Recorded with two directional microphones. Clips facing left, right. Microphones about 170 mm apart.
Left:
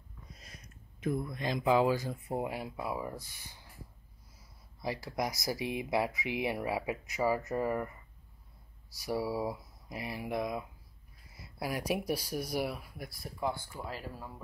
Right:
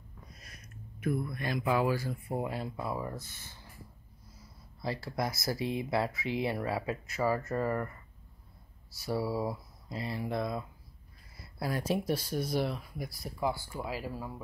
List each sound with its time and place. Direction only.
0.9 s speech: 20° left (ahead or behind)
4.8 s speech: 15° left (ahead or behind); by 14.3 s 10° right (ahead or behind)